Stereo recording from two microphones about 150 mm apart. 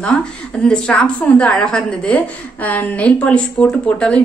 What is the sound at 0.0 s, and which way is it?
A woman's voice, 5° left (ahead or behind).